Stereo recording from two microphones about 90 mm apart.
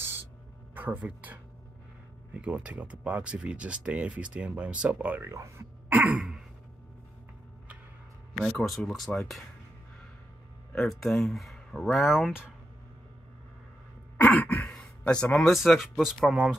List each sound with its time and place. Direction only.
0.0 s a sound: 25° right (ahead or behind)
0.7 s speech: 20° right (ahead or behind)
5.2 s speech: 30° right (ahead or behind)
5.9 s throat clearing: 15° right (ahead or behind)
8.5 s speech: centre (ahead or behind)
10.7 s speech: 5° left (ahead or behind)
14.2 s a sound: 20° left (ahead or behind)
14.7 s speech: 10° left (ahead or behind)